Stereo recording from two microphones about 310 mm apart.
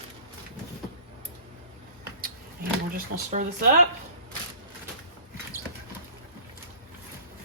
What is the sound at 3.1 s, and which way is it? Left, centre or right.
Speech, right.